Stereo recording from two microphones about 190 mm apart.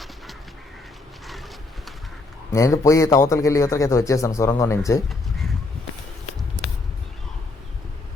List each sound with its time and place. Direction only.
2.5 s a man's voice: 15° left (ahead or behind)